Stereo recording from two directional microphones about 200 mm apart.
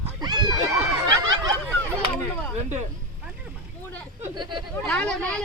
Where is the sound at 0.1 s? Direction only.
20° right (ahead or behind).